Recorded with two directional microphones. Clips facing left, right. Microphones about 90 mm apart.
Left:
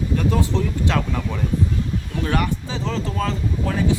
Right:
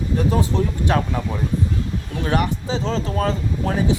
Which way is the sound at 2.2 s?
25° right (ahead or behind).